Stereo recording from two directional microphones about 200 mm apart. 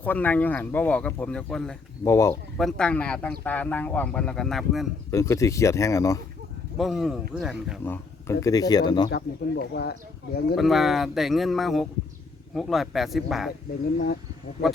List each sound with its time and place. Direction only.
0.0 s speech: 10° left (ahead or behind)
2.0 s speech: 15° left (ahead or behind)
2.6 s speech: 5° left (ahead or behind)
5.1 s speech: 15° left (ahead or behind)
6.7 s speech: centre (ahead or behind)
7.9 s speech: 15° left (ahead or behind)
9.0 s speech: 55° left (ahead or behind)
10.5 s speech: centre (ahead or behind)